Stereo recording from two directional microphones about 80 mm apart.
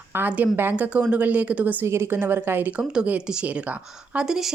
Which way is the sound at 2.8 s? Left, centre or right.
Centre.